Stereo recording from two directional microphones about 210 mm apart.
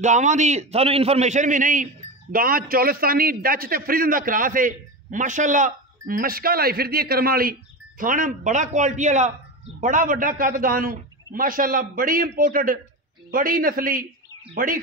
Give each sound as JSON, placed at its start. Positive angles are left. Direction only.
{"t": 0.0, "sound": "a man's voice", "side_deg": -35}